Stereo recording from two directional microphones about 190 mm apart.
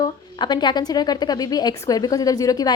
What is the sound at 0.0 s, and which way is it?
Speech, 20° left (ahead or behind).